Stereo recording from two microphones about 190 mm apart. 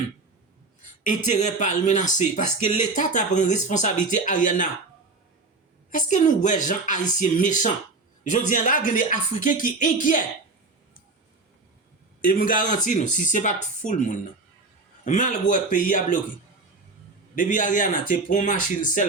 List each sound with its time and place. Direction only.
1.0 s speech: 40° left (ahead or behind)
5.9 s speech: 40° left (ahead or behind)
12.2 s speech: 50° left (ahead or behind)
15.0 s speech: 40° left (ahead or behind)
17.3 s speech: 45° left (ahead or behind)